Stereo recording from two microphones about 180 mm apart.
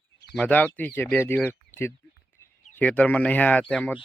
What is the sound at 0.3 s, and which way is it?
Speech, 10° left (ahead or behind).